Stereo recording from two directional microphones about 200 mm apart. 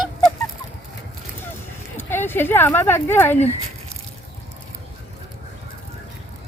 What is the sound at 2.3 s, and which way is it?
Speech, 10° left (ahead or behind).